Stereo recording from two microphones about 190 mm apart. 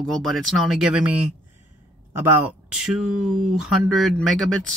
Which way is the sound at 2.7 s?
5° right (ahead or behind).